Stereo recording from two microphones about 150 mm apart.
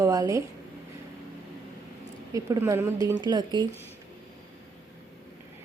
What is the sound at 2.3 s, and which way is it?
Speech, 20° right (ahead or behind).